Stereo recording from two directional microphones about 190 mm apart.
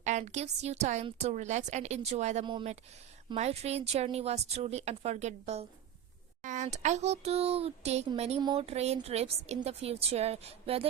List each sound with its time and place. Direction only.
0.0 s a woman's voice: 40° right (ahead or behind)
2.5 s a woman's voice: 25° right (ahead or behind)